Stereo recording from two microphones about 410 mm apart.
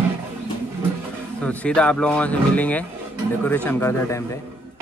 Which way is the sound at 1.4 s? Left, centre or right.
Centre.